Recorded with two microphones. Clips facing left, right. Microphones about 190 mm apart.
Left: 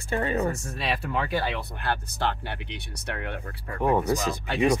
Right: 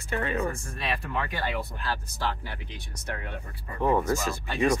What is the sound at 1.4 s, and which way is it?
Speech, 75° left (ahead or behind).